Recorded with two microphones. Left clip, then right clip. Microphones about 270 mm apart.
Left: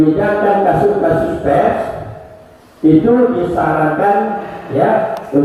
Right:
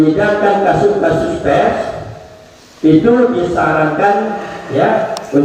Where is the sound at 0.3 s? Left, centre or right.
Centre.